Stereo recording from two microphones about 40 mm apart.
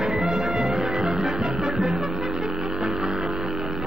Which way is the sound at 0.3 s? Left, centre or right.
Centre.